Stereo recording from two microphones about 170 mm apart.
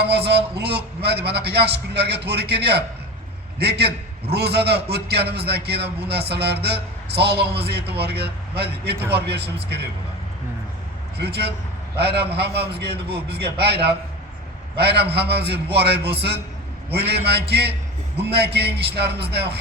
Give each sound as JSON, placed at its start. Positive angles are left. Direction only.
{"t": 0.3, "sound": "a man's voice", "side_deg": -70}
{"t": 11.2, "sound": "a man's voice", "side_deg": -70}
{"t": 14.8, "sound": "a man's voice", "side_deg": -70}